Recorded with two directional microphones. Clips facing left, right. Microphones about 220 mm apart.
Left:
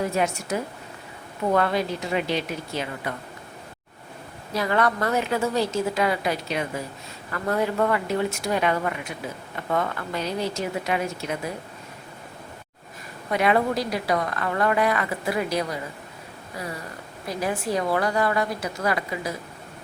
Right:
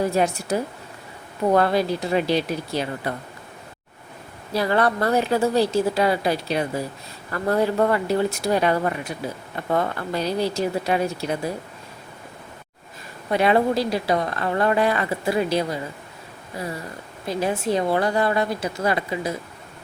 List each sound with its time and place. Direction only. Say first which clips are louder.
0.0 s a woman's voice: right 3 dB; 35° right (ahead or behind)
4.5 s a woman's voice: right 3 dB; 35° right (ahead or behind)
13.3 s a woman's voice: right 3 dB; 30° right (ahead or behind)
17.2 s a woman's voice: right 4 dB; 25° right (ahead or behind)